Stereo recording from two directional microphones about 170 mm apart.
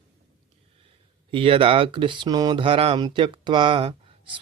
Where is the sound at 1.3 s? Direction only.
30° right (ahead or behind).